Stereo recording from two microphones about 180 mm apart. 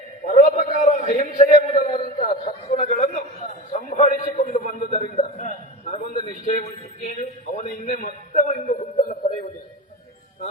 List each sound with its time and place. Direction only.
0.3 s a man's voice: 45° left (ahead or behind)